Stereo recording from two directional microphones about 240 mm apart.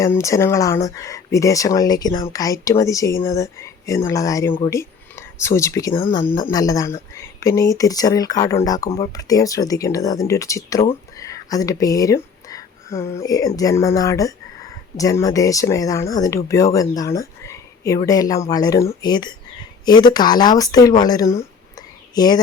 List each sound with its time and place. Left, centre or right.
0.0 s speech: centre
10.8 s a sound: centre
13.2 s speech: centre